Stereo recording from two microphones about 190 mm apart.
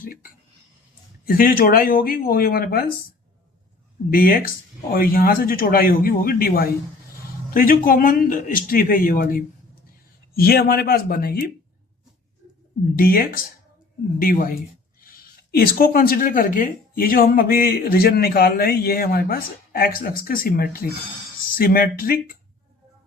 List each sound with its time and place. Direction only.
1.2 s speech: 50° left (ahead or behind)
4.1 s speech: 50° left (ahead or behind)
13.0 s speech: 50° left (ahead or behind)